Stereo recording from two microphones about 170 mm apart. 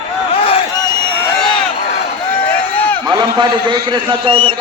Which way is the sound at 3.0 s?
25° right (ahead or behind).